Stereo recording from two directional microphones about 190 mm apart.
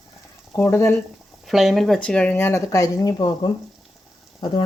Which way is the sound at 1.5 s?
Centre (ahead or behind).